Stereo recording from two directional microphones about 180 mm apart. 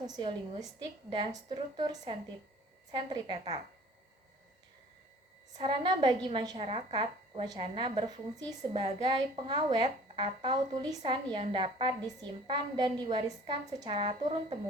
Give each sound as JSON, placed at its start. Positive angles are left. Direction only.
{"t": 0.0, "sound": "a woman's voice", "side_deg": -25}
{"t": 5.5, "sound": "a woman's voice", "side_deg": -25}